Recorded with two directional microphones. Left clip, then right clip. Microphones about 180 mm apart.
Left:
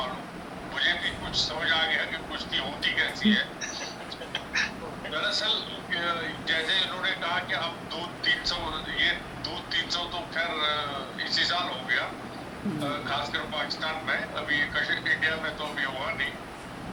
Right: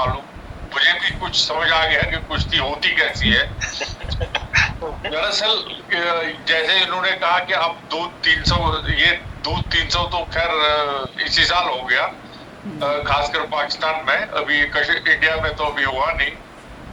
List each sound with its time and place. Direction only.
0.7 s speech: 50° right (ahead or behind)